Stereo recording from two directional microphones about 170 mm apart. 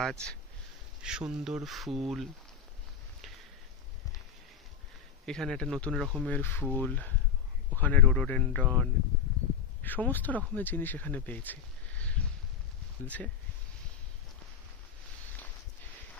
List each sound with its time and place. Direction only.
0.0 s speech: 5° left (ahead or behind)
5.2 s speech: 5° left (ahead or behind)